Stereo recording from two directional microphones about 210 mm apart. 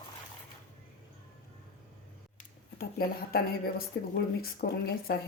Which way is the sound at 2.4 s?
45° left (ahead or behind).